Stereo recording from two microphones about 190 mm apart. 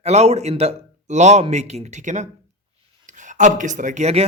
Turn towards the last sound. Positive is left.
turn(degrees=-35)  # may be behind; listen again after turning